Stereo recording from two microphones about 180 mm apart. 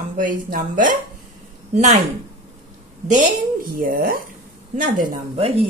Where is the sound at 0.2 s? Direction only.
50° right (ahead or behind).